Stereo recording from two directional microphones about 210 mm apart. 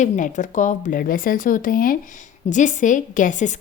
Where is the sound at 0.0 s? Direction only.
35° left (ahead or behind).